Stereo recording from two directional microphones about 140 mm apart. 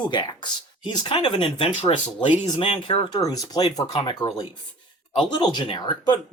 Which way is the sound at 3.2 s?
25° left (ahead or behind).